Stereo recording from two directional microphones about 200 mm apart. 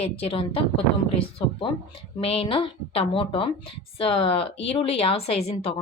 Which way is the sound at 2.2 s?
30° left (ahead or behind).